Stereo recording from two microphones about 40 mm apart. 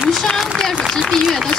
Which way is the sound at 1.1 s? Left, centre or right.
Centre.